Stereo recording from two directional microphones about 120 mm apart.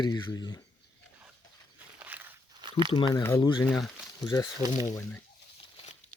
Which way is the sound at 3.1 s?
20° left (ahead or behind).